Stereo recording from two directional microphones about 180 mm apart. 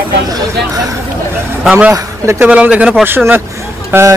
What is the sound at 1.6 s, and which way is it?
Speech, 5° right (ahead or behind).